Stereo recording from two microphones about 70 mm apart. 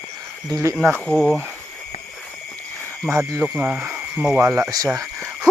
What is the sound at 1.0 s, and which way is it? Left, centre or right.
Speech, centre.